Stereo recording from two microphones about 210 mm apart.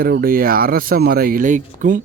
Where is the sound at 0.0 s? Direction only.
45° right (ahead or behind).